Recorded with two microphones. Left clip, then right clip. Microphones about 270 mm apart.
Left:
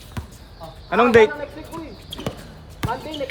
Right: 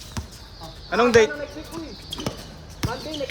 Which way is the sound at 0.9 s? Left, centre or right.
Left.